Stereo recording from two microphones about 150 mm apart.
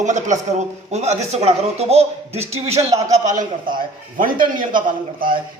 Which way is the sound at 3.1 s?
55° right (ahead or behind).